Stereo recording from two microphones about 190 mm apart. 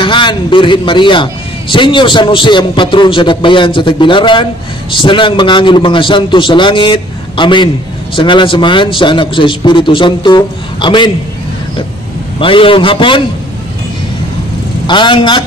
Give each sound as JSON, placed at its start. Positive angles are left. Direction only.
{"t": 0.0, "sound": "a man's voice", "side_deg": 25}
{"t": 12.4, "sound": "a man's voice", "side_deg": 25}
{"t": 14.9, "sound": "a man's voice", "side_deg": 25}